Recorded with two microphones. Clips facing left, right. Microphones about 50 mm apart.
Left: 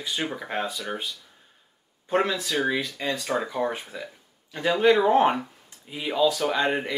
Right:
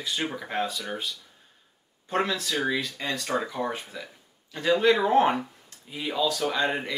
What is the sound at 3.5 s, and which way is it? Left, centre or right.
Speech, centre.